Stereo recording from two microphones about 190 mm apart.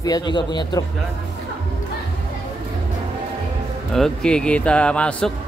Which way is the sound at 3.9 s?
5° left (ahead or behind).